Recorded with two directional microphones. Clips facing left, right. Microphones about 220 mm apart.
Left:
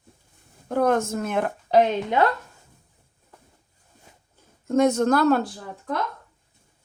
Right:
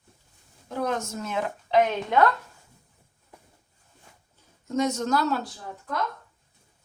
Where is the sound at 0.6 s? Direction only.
55° left (ahead or behind).